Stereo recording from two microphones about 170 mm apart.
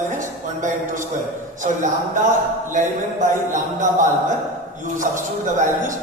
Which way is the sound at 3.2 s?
45° right (ahead or behind).